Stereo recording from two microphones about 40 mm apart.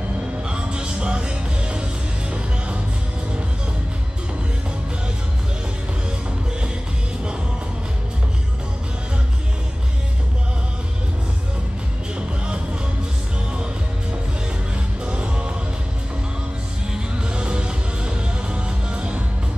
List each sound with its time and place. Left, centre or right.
0.5 s music: right
15.0 s music: right
16.9 s music: right